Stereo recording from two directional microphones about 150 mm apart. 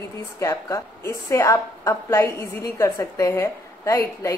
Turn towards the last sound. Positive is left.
turn(degrees=20)  # may be behind; listen again after turning